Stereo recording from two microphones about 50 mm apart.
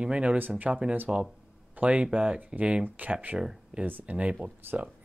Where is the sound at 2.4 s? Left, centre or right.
Right.